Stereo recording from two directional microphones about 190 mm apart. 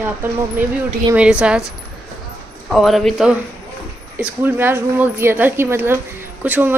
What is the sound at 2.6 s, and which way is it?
A woman's voice, centre (ahead or behind).